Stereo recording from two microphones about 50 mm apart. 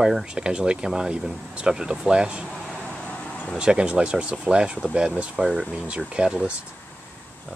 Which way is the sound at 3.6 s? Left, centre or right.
Centre.